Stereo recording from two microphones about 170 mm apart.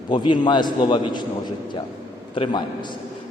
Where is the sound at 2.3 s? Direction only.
30° left (ahead or behind).